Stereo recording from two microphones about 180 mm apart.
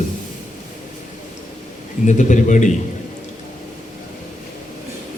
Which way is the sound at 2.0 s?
45° left (ahead or behind).